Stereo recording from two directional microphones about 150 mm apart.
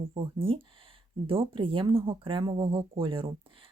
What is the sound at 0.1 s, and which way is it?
Speech, 40° right (ahead or behind).